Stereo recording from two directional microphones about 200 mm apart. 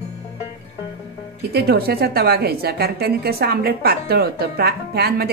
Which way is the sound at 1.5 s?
50° right (ahead or behind).